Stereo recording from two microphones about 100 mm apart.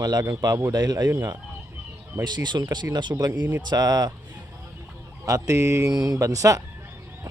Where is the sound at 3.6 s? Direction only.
45° right (ahead or behind).